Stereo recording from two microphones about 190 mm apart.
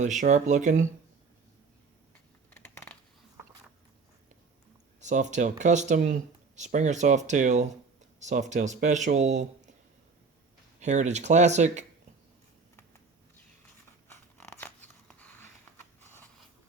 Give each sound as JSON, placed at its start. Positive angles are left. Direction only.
{"t": 0.0, "sound": "speech", "side_deg": -40}
{"t": 2.5, "sound": "crushing", "side_deg": 10}
{"t": 4.9, "sound": "speech", "side_deg": -40}
{"t": 10.8, "sound": "speech", "side_deg": -40}
{"t": 14.1, "sound": "scissors", "side_deg": 10}
{"t": 16.0, "sound": "a sound", "side_deg": 10}